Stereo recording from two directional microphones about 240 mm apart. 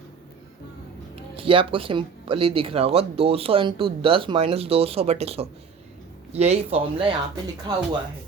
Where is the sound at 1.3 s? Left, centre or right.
Right.